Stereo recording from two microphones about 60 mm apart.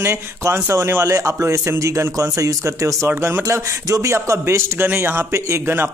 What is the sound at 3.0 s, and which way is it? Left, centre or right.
Speech, right.